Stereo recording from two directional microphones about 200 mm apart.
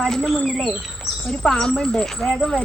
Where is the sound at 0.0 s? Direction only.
5° left (ahead or behind).